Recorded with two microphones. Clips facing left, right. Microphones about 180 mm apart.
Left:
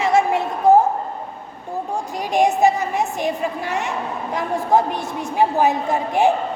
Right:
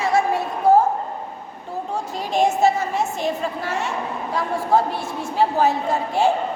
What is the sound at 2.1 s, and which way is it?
A woman's voice, 15° left (ahead or behind).